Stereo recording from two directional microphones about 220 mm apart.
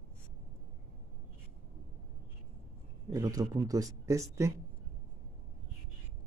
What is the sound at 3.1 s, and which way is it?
Speech, 15° right (ahead or behind).